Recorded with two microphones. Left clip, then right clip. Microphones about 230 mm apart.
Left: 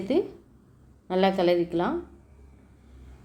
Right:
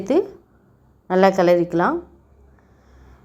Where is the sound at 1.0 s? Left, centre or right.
Right.